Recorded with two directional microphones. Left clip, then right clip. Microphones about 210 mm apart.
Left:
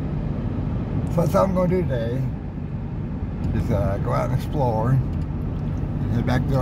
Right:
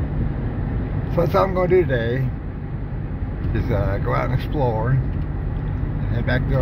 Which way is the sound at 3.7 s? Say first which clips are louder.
Right 1 dB; 5° left (ahead or behind).